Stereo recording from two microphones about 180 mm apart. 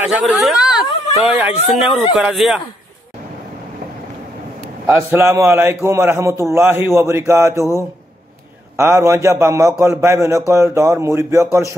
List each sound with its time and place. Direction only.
0.0 s speech: centre (ahead or behind)
4.8 s a man's voice: 15° right (ahead or behind)
8.7 s a man's voice: 15° right (ahead or behind)